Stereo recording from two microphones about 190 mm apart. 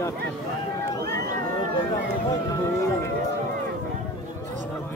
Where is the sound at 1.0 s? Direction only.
55° right (ahead or behind).